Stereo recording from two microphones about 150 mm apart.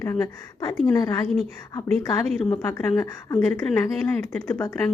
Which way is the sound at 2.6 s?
10° left (ahead or behind).